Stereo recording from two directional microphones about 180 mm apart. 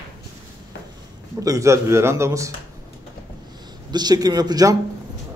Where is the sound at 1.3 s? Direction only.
20° right (ahead or behind).